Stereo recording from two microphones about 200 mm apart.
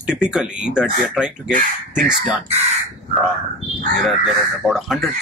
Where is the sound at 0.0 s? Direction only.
5° right (ahead or behind).